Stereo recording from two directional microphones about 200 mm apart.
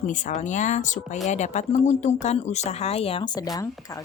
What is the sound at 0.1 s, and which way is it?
Speech, 40° left (ahead or behind).